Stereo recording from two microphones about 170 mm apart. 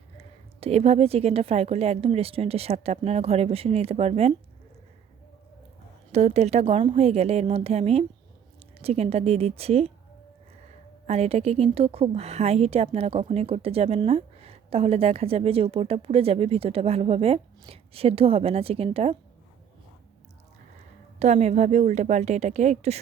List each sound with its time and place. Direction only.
0.2 s a woman's voice: 35° right (ahead or behind)
6.1 s a woman's voice: 40° right (ahead or behind)
21.2 s a woman's voice: 40° right (ahead or behind)